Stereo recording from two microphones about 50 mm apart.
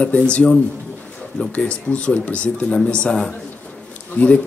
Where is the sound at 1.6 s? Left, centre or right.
Left.